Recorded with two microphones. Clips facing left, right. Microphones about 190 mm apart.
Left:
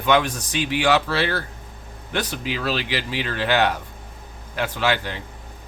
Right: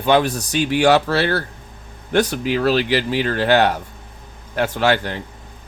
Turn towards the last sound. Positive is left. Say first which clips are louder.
# right 5 dB
turn(degrees=-50)  # may be behind; listen again after turning